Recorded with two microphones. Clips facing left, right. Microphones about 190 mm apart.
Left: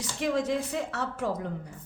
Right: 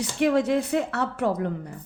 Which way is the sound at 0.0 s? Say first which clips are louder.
Right 7 dB; 65° right (ahead or behind).